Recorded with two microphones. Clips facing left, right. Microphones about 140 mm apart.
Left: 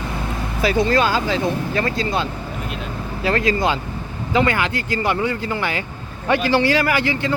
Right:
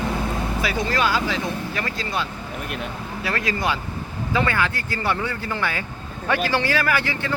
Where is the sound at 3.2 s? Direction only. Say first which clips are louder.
Left 6 dB; 25° left (ahead or behind).